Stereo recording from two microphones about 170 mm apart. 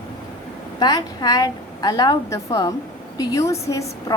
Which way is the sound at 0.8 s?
25° left (ahead or behind).